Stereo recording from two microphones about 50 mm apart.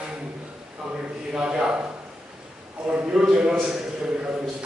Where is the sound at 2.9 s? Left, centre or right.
Centre.